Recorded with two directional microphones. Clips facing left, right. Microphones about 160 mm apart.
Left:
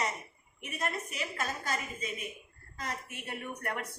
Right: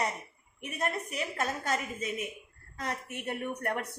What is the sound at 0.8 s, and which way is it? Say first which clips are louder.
A woman's voice: right 3 dB; 60° right (ahead or behind).